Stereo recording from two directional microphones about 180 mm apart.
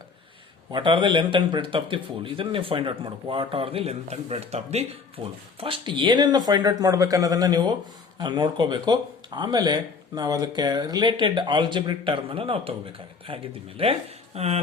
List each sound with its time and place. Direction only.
0.7 s a man's voice: 25° right (ahead or behind)